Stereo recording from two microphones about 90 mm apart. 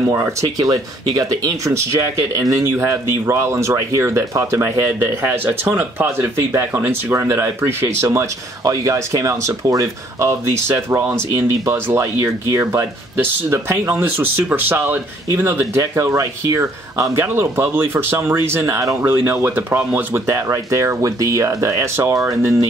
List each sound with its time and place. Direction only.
0.1 s speech: 30° right (ahead or behind)
0.6 s speech: 45° right (ahead or behind)